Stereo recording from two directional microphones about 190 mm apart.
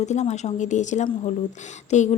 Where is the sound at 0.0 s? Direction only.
35° left (ahead or behind).